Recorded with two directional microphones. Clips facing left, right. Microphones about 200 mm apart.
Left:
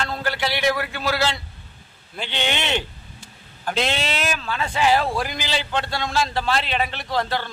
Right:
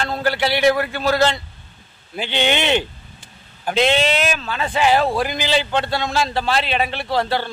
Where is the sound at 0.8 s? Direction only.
45° right (ahead or behind).